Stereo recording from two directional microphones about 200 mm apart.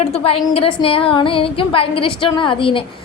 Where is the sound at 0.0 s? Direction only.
30° left (ahead or behind).